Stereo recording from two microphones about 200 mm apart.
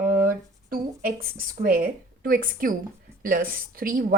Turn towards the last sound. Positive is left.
turn(degrees=-45)  # may be behind; listen again after turning